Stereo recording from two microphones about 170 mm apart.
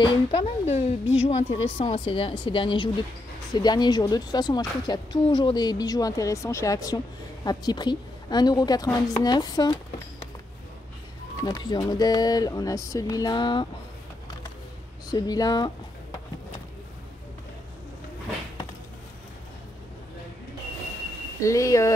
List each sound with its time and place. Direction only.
0.0 s a woman's voice: 35° left (ahead or behind)
11.4 s a woman's voice: 25° left (ahead or behind)
15.0 s a woman's voice: 20° left (ahead or behind)
21.4 s a woman's voice: 20° left (ahead or behind)